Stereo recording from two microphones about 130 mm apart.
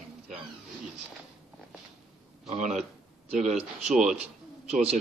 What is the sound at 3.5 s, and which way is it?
Speech, 5° right (ahead or behind).